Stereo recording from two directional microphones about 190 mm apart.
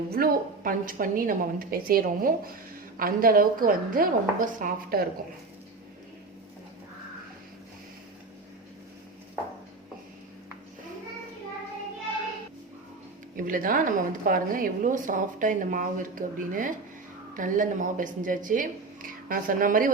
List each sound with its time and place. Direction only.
0.1 s a woman's voice: 50° right (ahead or behind)
13.3 s a woman's voice: 45° right (ahead or behind)